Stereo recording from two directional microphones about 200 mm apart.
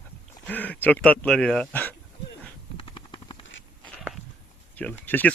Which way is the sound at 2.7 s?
25° left (ahead or behind).